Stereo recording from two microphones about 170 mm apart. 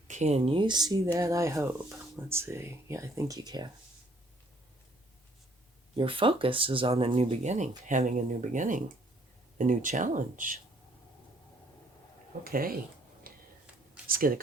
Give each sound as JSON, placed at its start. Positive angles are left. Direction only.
{"t": 0.1, "sound": "speech", "side_deg": -40}
{"t": 6.0, "sound": "speech", "side_deg": -30}
{"t": 12.5, "sound": "speech", "side_deg": -60}
{"t": 13.2, "sound": "a sound", "side_deg": -60}
{"t": 14.1, "sound": "speech", "side_deg": -55}